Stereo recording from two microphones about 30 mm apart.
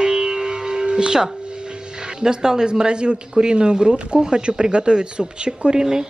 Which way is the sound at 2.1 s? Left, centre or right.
Right.